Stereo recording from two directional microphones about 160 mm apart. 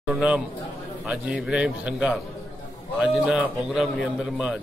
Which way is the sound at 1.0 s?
5° right (ahead or behind).